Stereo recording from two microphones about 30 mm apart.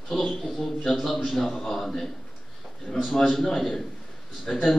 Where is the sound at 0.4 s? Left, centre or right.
Centre.